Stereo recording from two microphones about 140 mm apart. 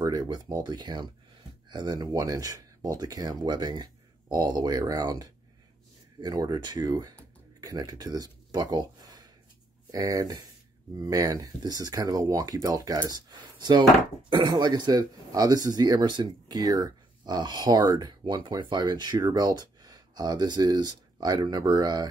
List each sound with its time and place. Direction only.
0.0 s speech: 30° right (ahead or behind)